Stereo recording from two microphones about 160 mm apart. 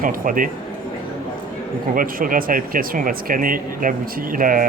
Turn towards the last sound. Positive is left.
turn(degrees=-60)  # may be behind; listen again after turning